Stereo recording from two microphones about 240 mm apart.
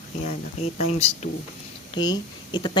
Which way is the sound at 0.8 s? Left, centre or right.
Left.